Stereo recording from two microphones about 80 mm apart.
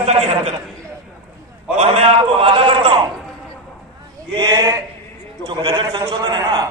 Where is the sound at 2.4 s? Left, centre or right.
Right.